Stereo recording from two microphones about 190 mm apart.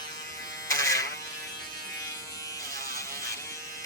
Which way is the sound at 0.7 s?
15° left (ahead or behind).